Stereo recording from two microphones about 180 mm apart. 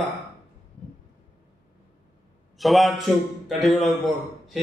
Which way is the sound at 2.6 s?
Centre (ahead or behind).